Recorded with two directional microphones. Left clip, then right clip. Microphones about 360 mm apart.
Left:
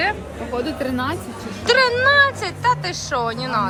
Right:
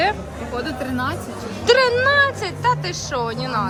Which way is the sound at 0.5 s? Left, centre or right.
Centre.